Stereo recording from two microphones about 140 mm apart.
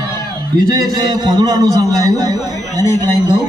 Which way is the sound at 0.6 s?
25° right (ahead or behind).